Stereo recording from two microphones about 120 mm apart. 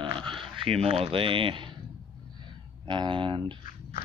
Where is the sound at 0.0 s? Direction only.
45° right (ahead or behind).